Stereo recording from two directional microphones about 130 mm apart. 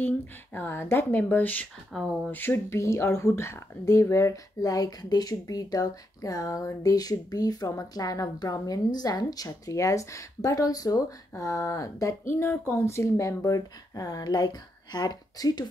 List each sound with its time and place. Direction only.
0.0 s speech: 15° left (ahead or behind)
1.9 s speech: centre (ahead or behind)
2.3 s speech: 15° left (ahead or behind)